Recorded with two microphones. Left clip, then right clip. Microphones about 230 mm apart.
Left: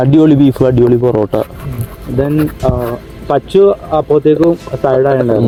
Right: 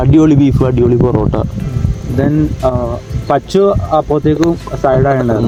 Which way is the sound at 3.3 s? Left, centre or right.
Right.